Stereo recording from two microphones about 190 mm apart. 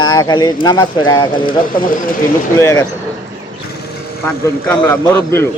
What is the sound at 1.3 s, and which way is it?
Speech, 45° left (ahead or behind).